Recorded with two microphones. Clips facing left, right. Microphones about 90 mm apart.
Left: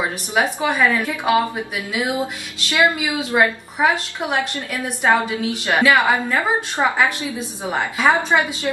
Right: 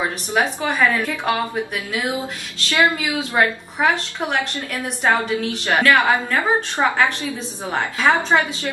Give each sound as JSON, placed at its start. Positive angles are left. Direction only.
{"t": 0.3, "sound": "a woman's voice", "side_deg": 15}
{"t": 2.7, "sound": "a woman's voice", "side_deg": 20}